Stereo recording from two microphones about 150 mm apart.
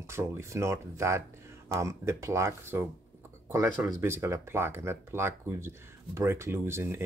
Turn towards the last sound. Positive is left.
turn(degrees=-15)  # may be behind; listen again after turning